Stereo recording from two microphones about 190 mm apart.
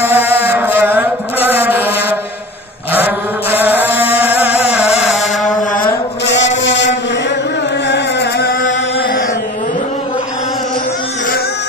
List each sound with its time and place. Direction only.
0.1 s chant: 10° right (ahead or behind)
0.5 s mantra: 10° right (ahead or behind)
2.9 s chant: 10° right (ahead or behind)
6.2 s chant: 70° left (ahead or behind)
7.9 s music: 60° left (ahead or behind)